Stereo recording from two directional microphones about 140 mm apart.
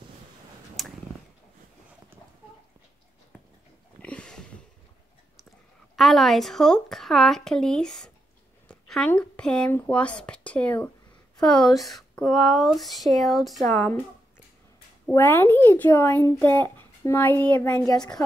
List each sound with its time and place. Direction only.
0.8 s a sound: centre (ahead or behind)
4.0 s a sound: 5° left (ahead or behind)
5.9 s speech: centre (ahead or behind)
13.7 s speech: 20° left (ahead or behind)
15.1 s speech: 15° left (ahead or behind)
17.6 s speech: 25° left (ahead or behind)